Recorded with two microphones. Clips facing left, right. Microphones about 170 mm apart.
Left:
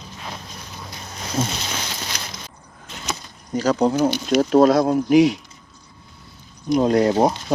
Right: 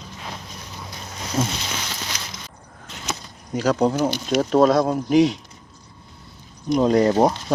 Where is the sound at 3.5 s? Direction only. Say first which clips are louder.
Left 1 dB; centre (ahead or behind).